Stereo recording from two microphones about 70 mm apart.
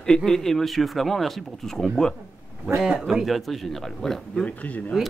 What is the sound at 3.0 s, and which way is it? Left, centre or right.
A man's voice, centre.